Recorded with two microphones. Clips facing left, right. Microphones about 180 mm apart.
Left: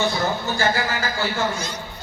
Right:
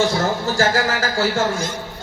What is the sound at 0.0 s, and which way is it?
A man's voice, 90° right.